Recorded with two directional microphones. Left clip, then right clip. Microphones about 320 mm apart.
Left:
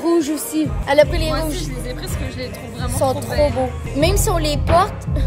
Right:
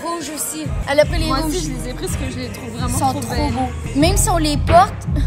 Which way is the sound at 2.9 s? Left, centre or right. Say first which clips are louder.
Left 3 dB; centre.